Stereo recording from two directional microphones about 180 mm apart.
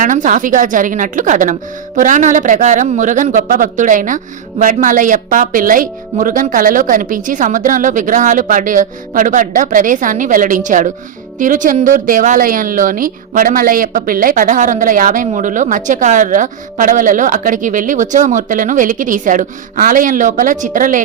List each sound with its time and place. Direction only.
0.0 s a woman's voice: 45° right (ahead or behind)